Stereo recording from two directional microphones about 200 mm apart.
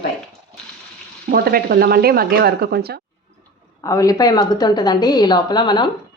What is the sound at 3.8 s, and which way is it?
A woman's voice, 15° left (ahead or behind).